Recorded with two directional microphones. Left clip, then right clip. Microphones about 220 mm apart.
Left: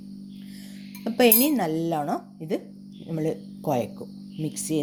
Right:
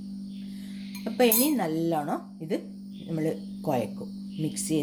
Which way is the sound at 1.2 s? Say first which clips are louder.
Left 3 dB; 30° left (ahead or behind).